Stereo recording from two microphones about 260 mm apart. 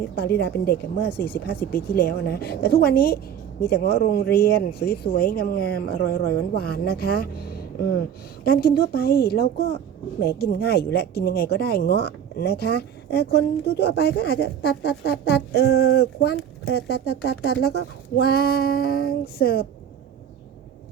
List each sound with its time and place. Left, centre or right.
0.2 s speech: left
1.1 s speech: centre
1.6 s speech: left